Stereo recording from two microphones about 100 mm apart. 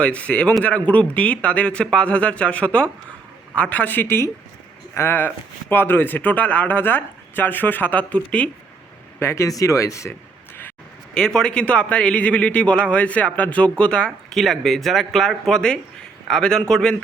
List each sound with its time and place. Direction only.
0.0 s a man's voice: 15° left (ahead or behind)
9.1 s speech: 30° left (ahead or behind)
11.1 s a man's voice: 5° left (ahead or behind)